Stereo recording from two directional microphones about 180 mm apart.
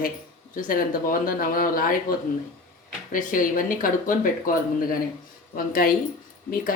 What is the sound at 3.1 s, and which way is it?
Speech, 50° left (ahead or behind).